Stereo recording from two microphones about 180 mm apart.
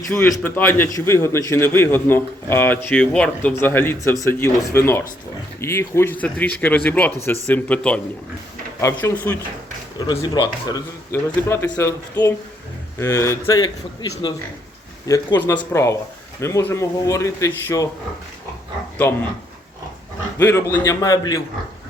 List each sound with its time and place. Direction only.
0.1 s a man's voice: 15° left (ahead or behind)
10.1 s a man's voice: 25° left (ahead or behind)
19.0 s a man's voice: 15° left (ahead or behind)
20.4 s a man's voice: 15° left (ahead or behind)